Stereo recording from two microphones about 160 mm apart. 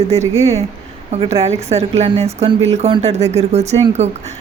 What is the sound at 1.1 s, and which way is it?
A woman's voice, 40° right (ahead or behind).